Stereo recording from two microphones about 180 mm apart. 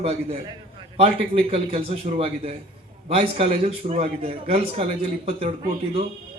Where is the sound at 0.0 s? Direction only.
35° right (ahead or behind).